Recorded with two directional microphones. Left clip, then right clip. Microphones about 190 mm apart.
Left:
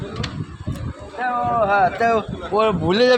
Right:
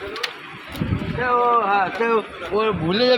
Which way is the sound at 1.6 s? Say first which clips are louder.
Left 3 dB; 55° left (ahead or behind).